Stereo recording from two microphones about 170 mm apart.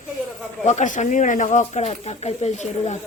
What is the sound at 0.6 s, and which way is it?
Speech, 45° left (ahead or behind).